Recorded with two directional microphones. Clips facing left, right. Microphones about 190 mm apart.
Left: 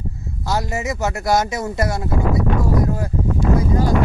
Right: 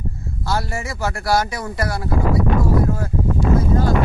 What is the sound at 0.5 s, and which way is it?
Speech, 20° left (ahead or behind).